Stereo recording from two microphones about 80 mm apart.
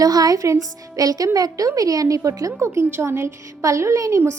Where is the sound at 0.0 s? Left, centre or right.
Right.